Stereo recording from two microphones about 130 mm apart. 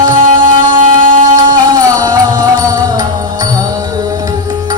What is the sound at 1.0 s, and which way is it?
Music, 75° right (ahead or behind).